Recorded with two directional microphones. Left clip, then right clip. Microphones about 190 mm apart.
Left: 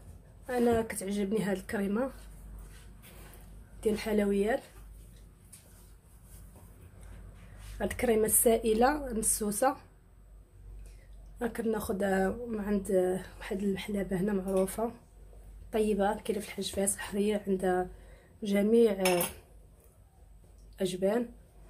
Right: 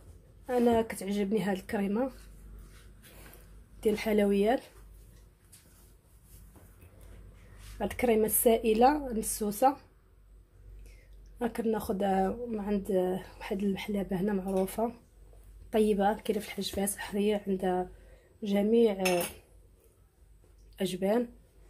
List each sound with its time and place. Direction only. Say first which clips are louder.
0.5 s speech: right 2 dB; 15° right (ahead or behind)
3.8 s a woman's voice: right 2 dB; 20° right (ahead or behind)
7.8 s speech: right 1 dB; 10° right (ahead or behind)
11.3 s speech: right 1 dB; 15° right (ahead or behind)
20.7 s speech: even; 20° right (ahead or behind)